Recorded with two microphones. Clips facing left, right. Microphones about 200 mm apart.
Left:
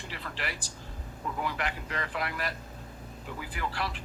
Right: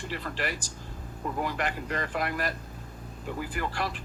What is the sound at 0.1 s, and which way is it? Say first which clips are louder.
Speech: right 5 dB; 45° right (ahead or behind).